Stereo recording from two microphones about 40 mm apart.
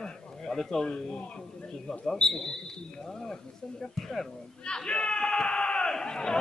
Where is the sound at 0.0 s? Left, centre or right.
Centre.